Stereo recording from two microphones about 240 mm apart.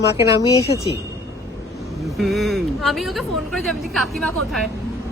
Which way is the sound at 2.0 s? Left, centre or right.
Centre.